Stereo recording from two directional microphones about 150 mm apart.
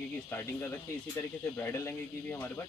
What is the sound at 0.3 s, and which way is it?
Speech, 15° left (ahead or behind).